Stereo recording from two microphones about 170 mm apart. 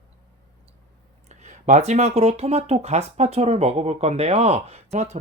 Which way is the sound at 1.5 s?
45° right (ahead or behind).